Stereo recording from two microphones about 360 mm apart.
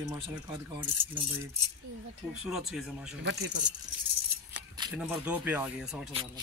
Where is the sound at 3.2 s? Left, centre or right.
Right.